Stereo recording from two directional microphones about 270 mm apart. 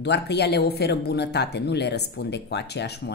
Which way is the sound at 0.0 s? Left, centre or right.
Left.